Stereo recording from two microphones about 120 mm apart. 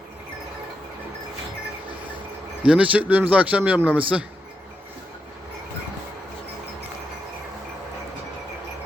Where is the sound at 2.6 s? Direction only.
10° right (ahead or behind).